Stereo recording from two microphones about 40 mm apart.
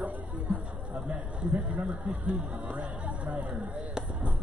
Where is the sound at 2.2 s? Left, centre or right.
Right.